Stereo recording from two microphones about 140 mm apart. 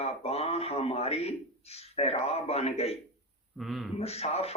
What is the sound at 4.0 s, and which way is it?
Speech, 45° left (ahead or behind).